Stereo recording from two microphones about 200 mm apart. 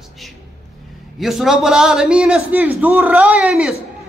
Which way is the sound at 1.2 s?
Centre (ahead or behind).